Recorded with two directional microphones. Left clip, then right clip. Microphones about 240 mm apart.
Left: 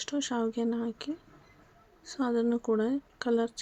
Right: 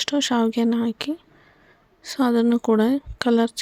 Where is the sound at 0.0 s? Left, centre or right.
Right.